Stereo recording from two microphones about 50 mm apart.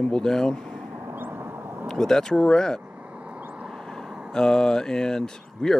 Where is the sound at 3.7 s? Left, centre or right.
Centre.